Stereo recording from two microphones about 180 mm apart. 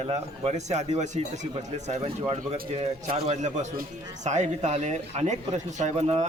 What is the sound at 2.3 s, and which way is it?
A man's voice, 35° right (ahead or behind).